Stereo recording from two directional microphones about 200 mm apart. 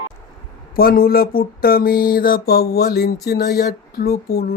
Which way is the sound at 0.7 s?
45° left (ahead or behind).